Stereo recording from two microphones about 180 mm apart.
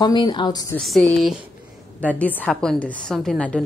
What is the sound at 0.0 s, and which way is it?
Speech, 25° left (ahead or behind).